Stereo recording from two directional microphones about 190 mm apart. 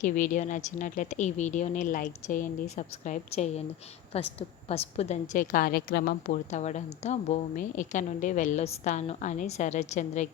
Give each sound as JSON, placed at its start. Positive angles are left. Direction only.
{"t": 0.0, "sound": "a woman's voice", "side_deg": 40}